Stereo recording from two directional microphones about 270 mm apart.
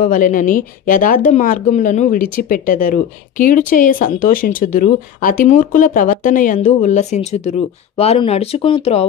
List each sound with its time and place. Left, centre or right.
0.0 s speech: left